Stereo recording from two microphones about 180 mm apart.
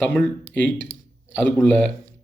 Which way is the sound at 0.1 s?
10° left (ahead or behind).